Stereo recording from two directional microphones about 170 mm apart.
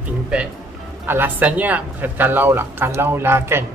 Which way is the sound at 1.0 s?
10° right (ahead or behind).